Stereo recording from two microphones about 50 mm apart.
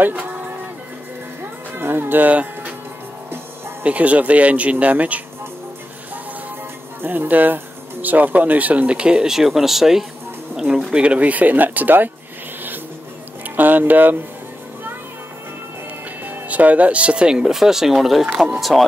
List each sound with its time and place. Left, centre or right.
0.0 s music: right
1.4 s music: right
3.8 s speech: right
7.0 s speech: right
8.9 s speech: centre
10.6 s speech: centre; by 12.1 s right
13.6 s speech: right
16.3 s speech: right; by 18.9 s centre